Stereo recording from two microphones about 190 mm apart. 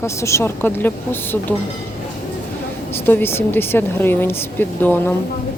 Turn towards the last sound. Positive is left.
turn(degrees=10)  # may be behind; listen again after turning